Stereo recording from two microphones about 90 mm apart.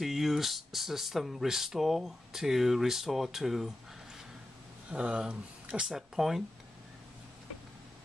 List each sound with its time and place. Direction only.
0.0 s speech: 5° right (ahead or behind)
4.9 s speech: 10° right (ahead or behind)